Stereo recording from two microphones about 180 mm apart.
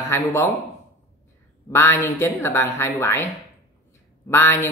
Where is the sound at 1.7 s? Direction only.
10° left (ahead or behind).